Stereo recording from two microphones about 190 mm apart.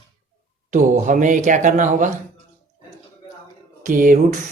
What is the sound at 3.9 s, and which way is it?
Speech, 45° right (ahead or behind).